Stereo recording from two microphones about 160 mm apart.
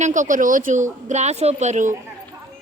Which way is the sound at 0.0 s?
50° right (ahead or behind).